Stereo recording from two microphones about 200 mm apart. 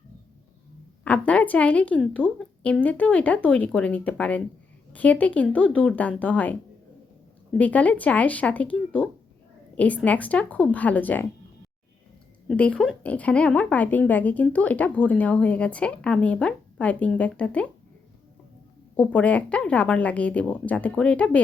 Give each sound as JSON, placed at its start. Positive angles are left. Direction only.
{"t": 1.0, "sound": "a woman's voice", "side_deg": 5}
{"t": 7.6, "sound": "a woman's voice", "side_deg": 5}
{"t": 12.5, "sound": "a woman's voice", "side_deg": 5}
{"t": 18.9, "sound": "a woman's voice", "side_deg": 5}